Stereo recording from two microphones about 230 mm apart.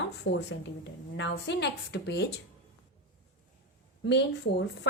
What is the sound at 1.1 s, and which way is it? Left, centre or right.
A woman's voice, left.